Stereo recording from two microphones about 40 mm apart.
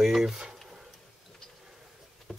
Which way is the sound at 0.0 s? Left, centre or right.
Centre.